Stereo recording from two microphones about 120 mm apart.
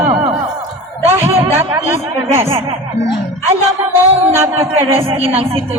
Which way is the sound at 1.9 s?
20° right (ahead or behind).